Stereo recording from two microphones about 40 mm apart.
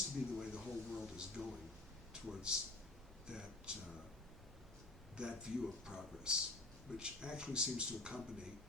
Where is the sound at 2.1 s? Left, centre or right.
Right.